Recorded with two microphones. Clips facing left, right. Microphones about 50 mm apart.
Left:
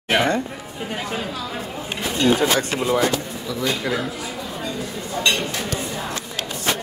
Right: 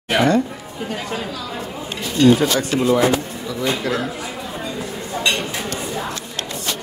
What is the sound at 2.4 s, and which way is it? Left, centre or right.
Speech, left.